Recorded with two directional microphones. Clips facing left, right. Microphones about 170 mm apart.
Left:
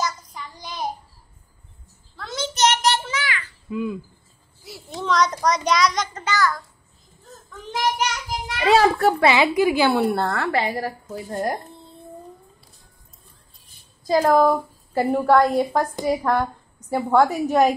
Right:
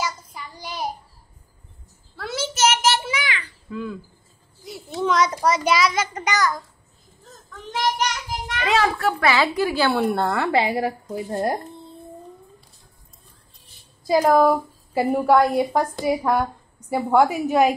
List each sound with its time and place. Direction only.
0.0 s child singing: 10° right (ahead or behind)
2.1 s a sound: 10° right (ahead or behind)
3.7 s a woman's voice: 15° left (ahead or behind)
4.6 s a child's voice: centre (ahead or behind)
6.2 s a child's voice: 20° right (ahead or behind)
8.6 s a child's voice: 35° left (ahead or behind)
9.3 s a woman's voice: 15° left (ahead or behind)
10.2 s speech: 15° right (ahead or behind)
14.0 s a woman's voice: 10° right (ahead or behind)